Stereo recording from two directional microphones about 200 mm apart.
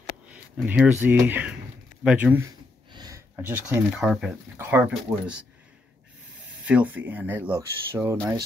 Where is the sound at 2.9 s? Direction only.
20° right (ahead or behind).